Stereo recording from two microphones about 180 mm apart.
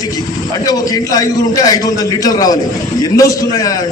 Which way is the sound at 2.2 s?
20° left (ahead or behind).